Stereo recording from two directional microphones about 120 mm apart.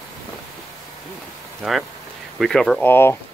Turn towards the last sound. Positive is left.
turn(degrees=15)  # may be behind; listen again after turning